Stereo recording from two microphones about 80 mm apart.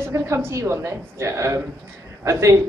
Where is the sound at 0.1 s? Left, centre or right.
Right.